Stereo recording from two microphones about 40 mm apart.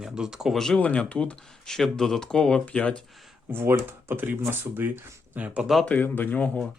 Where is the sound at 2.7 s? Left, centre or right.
Left.